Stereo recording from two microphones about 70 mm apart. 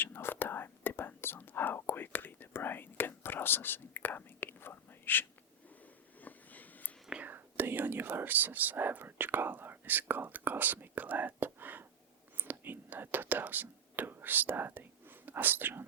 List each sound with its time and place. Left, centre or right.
0.0 s whispering: left
6.2 s a sound: left
7.3 s whispering: right
15.3 s speech: right